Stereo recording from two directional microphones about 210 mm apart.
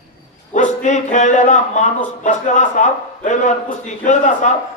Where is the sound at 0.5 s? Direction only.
35° left (ahead or behind).